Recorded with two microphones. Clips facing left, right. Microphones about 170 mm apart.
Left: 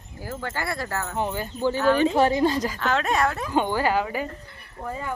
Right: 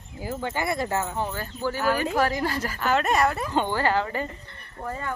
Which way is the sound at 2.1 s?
25° left (ahead or behind).